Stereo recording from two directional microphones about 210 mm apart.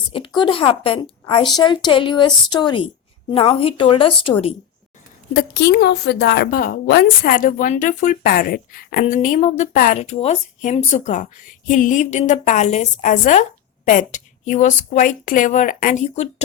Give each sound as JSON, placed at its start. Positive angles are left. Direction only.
{"t": 0.3, "sound": "a woman's voice", "side_deg": 25}
{"t": 5.3, "sound": "a woman's voice", "side_deg": 50}